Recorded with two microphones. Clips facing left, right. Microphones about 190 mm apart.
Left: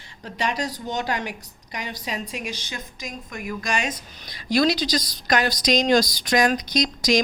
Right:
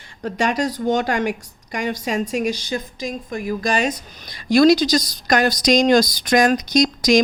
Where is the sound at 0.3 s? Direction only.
50° right (ahead or behind).